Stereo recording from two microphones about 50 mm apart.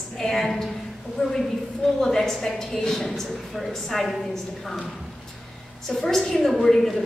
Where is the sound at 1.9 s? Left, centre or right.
Centre.